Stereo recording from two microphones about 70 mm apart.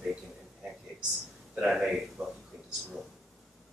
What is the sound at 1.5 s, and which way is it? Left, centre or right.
Speech, centre.